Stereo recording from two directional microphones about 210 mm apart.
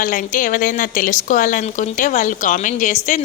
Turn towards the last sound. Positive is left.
turn(degrees=35)  # may be behind; listen again after turning